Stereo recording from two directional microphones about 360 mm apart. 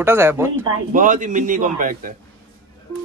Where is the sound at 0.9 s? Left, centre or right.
Right.